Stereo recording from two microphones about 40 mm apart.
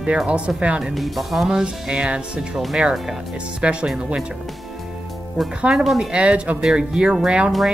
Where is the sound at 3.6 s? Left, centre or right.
Right.